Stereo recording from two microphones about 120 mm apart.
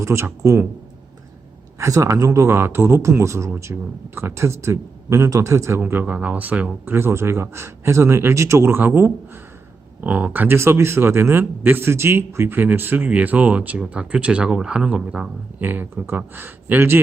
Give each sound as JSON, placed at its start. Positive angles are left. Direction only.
{"t": 0.0, "sound": "speech", "side_deg": -25}
{"t": 1.8, "sound": "a man's voice", "side_deg": -25}